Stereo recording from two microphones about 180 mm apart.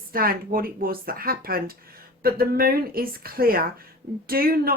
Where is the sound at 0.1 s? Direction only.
55° right (ahead or behind).